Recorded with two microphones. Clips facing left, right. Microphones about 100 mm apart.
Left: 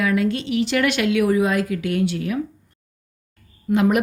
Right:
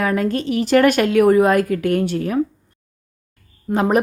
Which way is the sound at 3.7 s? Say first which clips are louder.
Even; 35° right (ahead or behind).